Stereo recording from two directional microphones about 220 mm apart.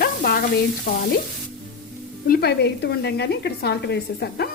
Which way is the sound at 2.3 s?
45° left (ahead or behind).